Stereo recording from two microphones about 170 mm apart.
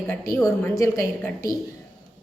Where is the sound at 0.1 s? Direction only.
15° left (ahead or behind).